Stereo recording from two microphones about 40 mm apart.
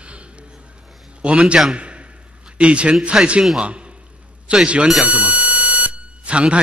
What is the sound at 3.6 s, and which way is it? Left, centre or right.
A man's voice, right.